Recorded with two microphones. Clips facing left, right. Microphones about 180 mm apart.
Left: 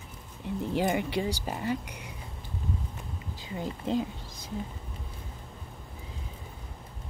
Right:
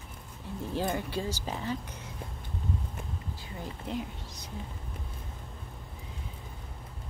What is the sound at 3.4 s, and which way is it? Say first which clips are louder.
Speech: left 5 dB; 25° left (ahead or behind).